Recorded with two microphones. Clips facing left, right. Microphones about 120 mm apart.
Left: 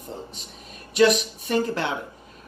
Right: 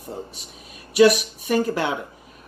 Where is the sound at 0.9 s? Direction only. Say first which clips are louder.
Right 3 dB; 5° right (ahead or behind).